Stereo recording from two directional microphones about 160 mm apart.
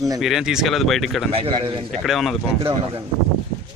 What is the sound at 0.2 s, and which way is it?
Speech, centre (ahead or behind).